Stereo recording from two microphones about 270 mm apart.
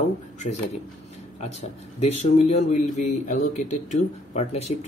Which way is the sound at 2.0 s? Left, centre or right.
Left.